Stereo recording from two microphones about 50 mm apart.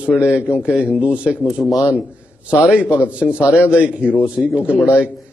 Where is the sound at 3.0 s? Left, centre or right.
Right.